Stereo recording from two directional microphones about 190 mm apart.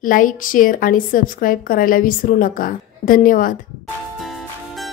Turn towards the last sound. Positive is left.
turn(degrees=0)  # may be behind; listen again after turning